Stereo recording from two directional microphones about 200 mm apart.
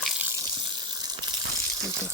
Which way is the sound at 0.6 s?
20° right (ahead or behind).